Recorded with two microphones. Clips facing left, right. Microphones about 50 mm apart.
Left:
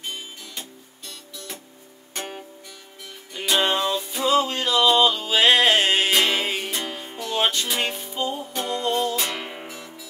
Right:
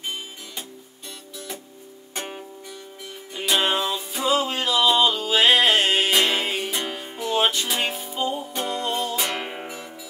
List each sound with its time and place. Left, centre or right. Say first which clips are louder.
0.0 s music: right 2 dB; centre